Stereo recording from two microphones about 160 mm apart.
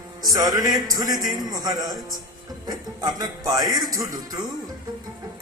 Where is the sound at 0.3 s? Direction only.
25° right (ahead or behind).